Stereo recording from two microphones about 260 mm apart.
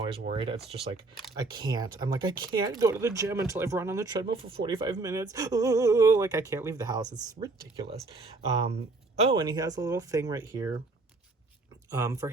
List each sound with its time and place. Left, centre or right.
0.3 s speech: centre
9.2 s speech: centre
11.9 s speech: centre